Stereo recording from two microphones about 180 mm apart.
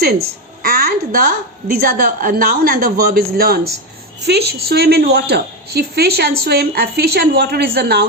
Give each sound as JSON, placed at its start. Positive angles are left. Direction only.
{"t": 0.0, "sound": "a woman's voice", "side_deg": -60}